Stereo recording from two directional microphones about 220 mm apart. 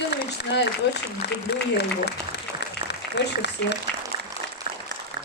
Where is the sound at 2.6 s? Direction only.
50° left (ahead or behind).